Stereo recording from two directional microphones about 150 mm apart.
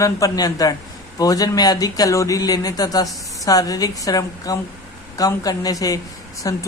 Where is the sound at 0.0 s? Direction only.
25° left (ahead or behind).